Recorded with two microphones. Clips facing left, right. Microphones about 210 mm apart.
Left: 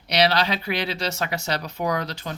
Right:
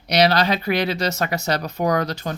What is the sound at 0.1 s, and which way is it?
Speech, 45° right (ahead or behind).